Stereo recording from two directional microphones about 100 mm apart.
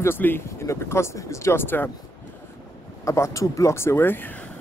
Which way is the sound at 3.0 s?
30° left (ahead or behind).